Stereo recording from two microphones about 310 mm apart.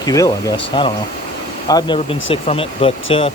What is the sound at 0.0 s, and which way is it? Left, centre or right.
Speech, centre.